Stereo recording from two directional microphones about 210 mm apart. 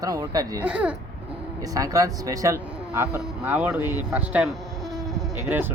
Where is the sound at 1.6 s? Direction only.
15° right (ahead or behind).